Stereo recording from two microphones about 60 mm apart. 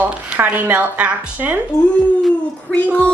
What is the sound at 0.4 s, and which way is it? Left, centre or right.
A woman's voice, right.